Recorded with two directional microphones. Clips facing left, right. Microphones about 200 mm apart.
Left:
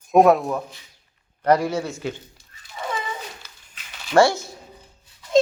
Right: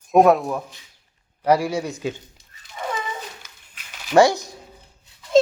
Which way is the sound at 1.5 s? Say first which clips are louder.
Even; 10° right (ahead or behind).